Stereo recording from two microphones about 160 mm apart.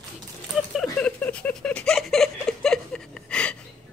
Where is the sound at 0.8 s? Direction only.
5° left (ahead or behind).